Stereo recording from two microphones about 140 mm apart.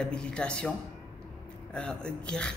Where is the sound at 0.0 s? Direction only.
5° left (ahead or behind).